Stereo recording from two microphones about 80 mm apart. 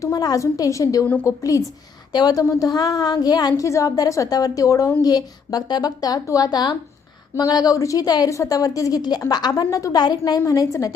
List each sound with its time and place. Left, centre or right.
0.0 s a woman's voice: left
3.6 s a woman's voice: left
5.0 s a woman's voice: left
8.3 s a woman's voice: left
9.9 s speech: left
10.4 s a woman's voice: left